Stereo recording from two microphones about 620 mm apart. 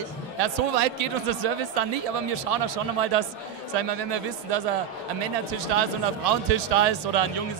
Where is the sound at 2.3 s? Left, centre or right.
Right.